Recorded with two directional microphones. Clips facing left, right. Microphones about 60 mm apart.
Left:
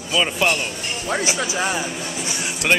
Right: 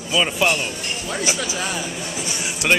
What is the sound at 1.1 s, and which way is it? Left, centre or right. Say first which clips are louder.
Speech: left 3 dB; left.